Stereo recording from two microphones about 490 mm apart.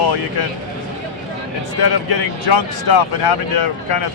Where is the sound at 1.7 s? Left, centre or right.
Left.